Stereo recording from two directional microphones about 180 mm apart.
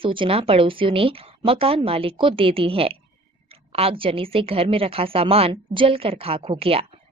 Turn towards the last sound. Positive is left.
turn(degrees=-30)  # may be behind; listen again after turning